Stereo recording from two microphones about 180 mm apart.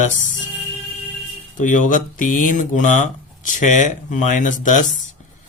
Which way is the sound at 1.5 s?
45° left (ahead or behind).